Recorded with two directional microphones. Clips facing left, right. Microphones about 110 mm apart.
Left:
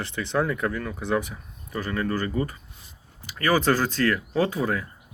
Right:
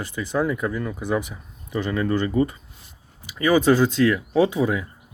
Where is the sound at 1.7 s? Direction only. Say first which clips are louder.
Right 4 dB; 20° right (ahead or behind).